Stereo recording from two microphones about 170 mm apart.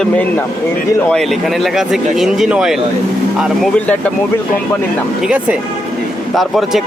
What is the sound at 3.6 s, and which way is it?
Speech, 5° left (ahead or behind).